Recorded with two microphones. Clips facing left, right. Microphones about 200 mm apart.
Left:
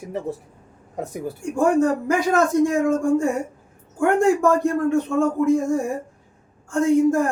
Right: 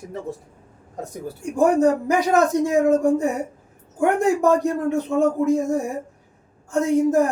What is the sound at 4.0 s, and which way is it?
Speech, 20° right (ahead or behind).